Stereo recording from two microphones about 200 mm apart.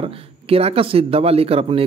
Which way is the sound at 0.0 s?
30° right (ahead or behind).